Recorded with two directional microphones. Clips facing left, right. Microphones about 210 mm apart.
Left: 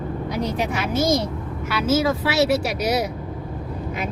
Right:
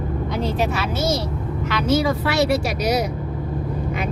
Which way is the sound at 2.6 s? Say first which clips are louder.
Right 1 dB; 60° left (ahead or behind).